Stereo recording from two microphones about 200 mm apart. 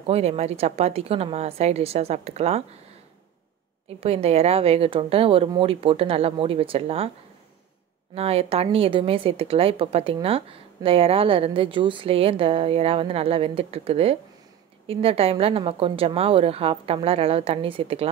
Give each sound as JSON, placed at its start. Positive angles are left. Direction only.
{"t": 0.0, "sound": "a woman's voice", "side_deg": -30}
{"t": 4.0, "sound": "a woman's voice", "side_deg": -30}
{"t": 8.1, "sound": "a woman's voice", "side_deg": -30}